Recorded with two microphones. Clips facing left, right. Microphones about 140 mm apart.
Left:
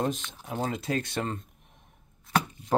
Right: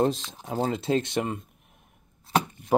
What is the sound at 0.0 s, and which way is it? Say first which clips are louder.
Speech: right 5 dB; 35° right (ahead or behind).